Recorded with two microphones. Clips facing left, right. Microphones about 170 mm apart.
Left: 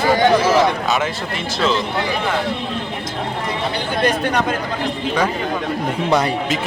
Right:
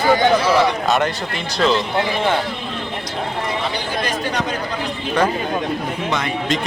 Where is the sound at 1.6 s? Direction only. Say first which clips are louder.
Right 2 dB; centre (ahead or behind).